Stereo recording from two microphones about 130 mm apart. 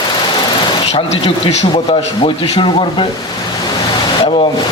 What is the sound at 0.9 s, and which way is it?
A man's voice, 55° left (ahead or behind).